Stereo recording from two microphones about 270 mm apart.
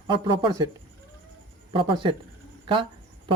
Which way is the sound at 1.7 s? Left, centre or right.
Centre.